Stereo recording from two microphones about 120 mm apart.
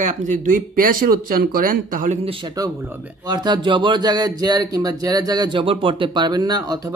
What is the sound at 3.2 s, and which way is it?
Speech, 35° right (ahead or behind).